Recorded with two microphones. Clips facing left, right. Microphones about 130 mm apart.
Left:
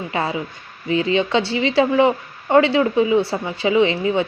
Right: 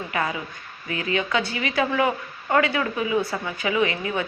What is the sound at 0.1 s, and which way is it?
A woman's voice, 30° left (ahead or behind).